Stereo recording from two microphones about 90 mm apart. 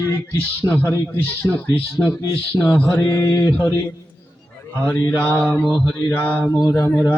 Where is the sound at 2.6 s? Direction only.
15° left (ahead or behind).